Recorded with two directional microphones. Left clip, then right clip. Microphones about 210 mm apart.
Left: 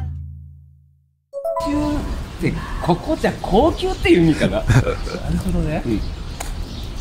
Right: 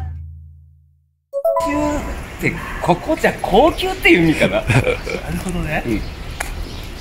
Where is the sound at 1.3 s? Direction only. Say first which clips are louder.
Right 7 dB; centre (ahead or behind).